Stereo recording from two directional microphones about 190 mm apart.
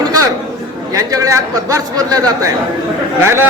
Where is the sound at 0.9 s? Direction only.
15° right (ahead or behind).